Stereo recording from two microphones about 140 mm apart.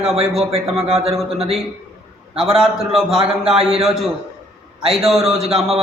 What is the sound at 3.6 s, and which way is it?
A man's voice, 45° right (ahead or behind).